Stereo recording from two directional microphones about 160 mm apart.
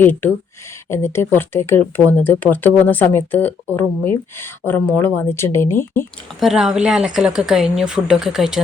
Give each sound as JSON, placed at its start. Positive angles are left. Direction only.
{"t": 0.0, "sound": "speech", "side_deg": 10}
{"t": 6.4, "sound": "speech", "side_deg": 0}